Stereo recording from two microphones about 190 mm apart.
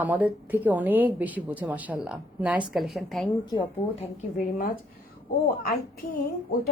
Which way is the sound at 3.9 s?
45° left (ahead or behind).